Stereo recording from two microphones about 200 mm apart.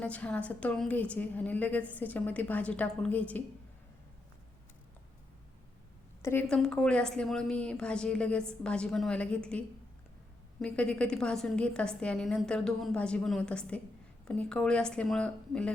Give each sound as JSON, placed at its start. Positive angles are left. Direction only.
{"t": 0.0, "sound": "a woman's voice", "side_deg": 5}
{"t": 6.2, "sound": "a woman's voice", "side_deg": 5}